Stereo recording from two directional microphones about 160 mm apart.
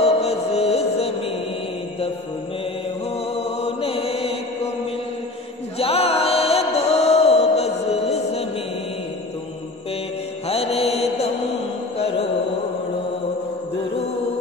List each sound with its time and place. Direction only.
0.0 s music: 40° left (ahead or behind)
3.3 s chant: 35° left (ahead or behind)
5.8 s music: 40° left (ahead or behind)
10.5 s mantra: 40° left (ahead or behind)